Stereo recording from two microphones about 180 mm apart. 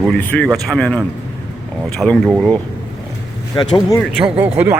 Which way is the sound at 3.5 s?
25° left (ahead or behind).